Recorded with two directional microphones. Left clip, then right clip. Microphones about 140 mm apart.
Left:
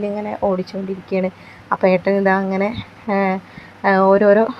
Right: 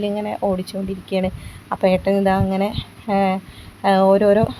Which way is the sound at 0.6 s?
25° right (ahead or behind).